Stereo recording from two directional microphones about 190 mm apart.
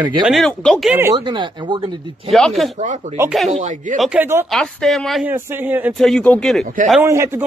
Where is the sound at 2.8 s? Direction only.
40° right (ahead or behind).